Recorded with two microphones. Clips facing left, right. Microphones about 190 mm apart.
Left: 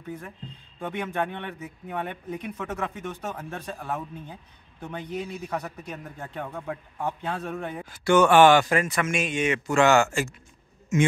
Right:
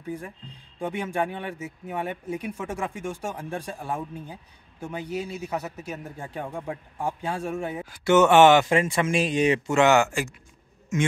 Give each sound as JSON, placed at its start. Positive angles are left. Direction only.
{"t": 0.0, "sound": "a man's voice", "side_deg": -10}
{"t": 8.0, "sound": "speech", "side_deg": -20}
{"t": 9.7, "sound": "a man's voice", "side_deg": -20}